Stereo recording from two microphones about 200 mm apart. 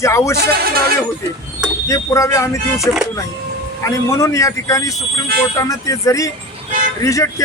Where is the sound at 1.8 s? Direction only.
15° left (ahead or behind).